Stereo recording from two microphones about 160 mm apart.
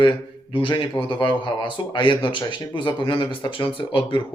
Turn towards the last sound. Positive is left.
turn(degrees=30)  # may be behind; listen again after turning